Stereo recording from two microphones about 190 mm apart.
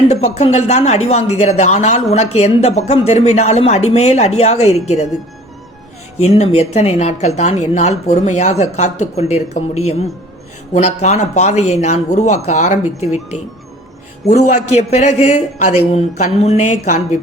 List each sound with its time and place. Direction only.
0.1 s speech: 35° left (ahead or behind)
6.2 s speech: 35° left (ahead or behind)
14.3 s speech: 40° left (ahead or behind)